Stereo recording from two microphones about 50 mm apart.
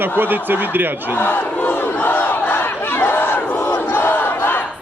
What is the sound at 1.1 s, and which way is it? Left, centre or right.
Battle cry, left.